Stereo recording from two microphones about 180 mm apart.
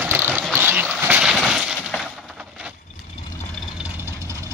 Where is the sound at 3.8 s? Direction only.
15° right (ahead or behind).